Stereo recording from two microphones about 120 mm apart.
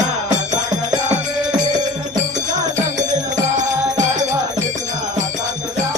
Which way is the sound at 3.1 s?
90° right.